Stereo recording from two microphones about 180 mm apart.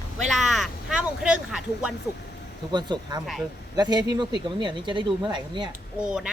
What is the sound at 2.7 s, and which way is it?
Speech, 25° right (ahead or behind).